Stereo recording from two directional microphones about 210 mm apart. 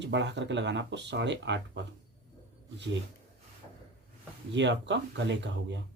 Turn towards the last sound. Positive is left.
turn(degrees=-60)  # may be behind; listen again after turning